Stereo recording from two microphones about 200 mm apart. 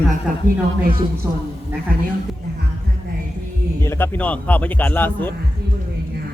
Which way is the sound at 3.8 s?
10° left (ahead or behind).